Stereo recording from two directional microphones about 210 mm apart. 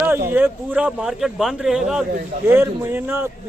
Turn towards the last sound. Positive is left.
turn(degrees=-10)  # may be behind; listen again after turning